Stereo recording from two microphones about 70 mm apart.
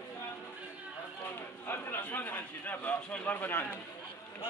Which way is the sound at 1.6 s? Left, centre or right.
Left.